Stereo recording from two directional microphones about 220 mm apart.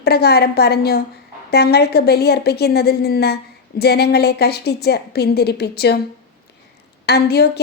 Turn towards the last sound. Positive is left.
turn(degrees=50)  # may be behind; listen again after turning